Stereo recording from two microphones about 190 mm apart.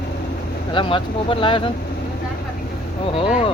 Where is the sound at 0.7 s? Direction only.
25° left (ahead or behind).